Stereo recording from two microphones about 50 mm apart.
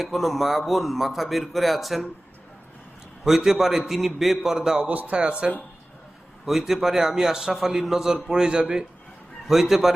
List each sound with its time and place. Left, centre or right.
0.0 s speech: centre
3.2 s speech: centre
4.9 s speech: right
6.4 s a man's voice: centre
9.5 s speech: centre